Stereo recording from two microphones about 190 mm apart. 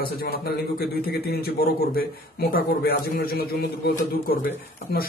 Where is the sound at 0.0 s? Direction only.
55° left (ahead or behind).